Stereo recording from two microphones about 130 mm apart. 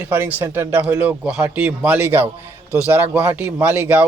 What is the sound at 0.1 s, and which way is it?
A man's voice, 15° right (ahead or behind).